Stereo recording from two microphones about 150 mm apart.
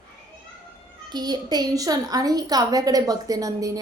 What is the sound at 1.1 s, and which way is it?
A woman's voice, 25° right (ahead or behind).